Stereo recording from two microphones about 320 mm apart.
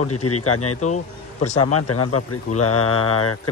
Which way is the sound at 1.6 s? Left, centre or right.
Left.